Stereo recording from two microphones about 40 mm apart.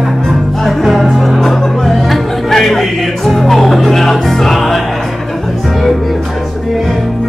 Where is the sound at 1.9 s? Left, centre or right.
Centre.